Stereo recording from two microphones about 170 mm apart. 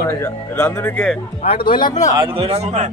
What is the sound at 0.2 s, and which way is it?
Speech, 15° left (ahead or behind).